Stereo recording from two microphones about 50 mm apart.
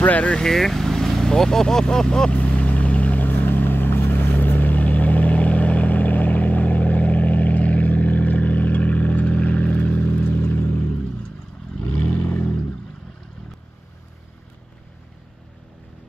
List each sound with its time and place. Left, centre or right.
0.0 s speech: left
0.4 s vehicle: centre; by 10.1 s left
10.2 s vehicle: left